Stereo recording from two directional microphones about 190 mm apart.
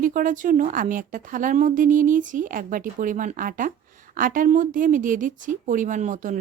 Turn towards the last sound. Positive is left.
turn(degrees=-40)  # may be behind; listen again after turning